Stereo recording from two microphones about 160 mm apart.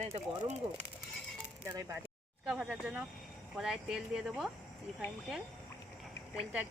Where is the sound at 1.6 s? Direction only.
15° right (ahead or behind).